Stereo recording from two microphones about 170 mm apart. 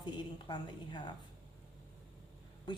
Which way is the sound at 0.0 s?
25° left (ahead or behind).